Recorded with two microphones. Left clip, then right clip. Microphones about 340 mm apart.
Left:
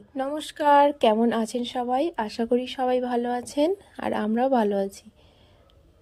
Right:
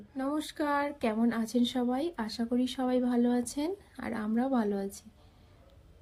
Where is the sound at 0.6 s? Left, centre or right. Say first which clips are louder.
Left 14 dB; left.